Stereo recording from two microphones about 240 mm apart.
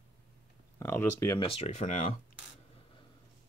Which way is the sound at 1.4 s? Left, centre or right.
Left.